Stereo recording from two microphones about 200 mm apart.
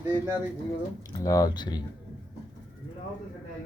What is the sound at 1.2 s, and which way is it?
Speech, 20° left (ahead or behind).